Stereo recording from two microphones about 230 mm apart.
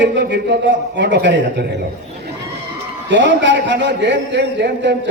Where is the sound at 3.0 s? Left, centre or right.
Right.